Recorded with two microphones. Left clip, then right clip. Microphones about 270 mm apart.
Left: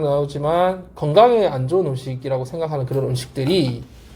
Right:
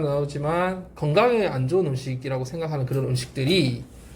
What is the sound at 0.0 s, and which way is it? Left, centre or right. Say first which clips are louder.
Speech: left 6 dB; centre.